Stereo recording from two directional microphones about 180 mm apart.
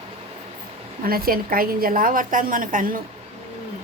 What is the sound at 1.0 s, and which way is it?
A woman's voice, 55° right (ahead or behind).